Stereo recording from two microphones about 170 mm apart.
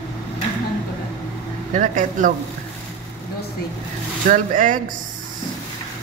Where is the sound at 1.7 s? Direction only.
45° right (ahead or behind).